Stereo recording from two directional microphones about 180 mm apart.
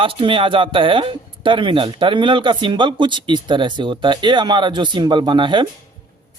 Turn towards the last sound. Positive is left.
turn(degrees=-25)  # may be behind; listen again after turning